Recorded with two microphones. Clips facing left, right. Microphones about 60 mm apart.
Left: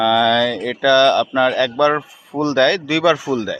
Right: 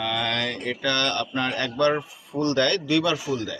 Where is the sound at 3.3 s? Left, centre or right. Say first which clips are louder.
Left 7 dB; left.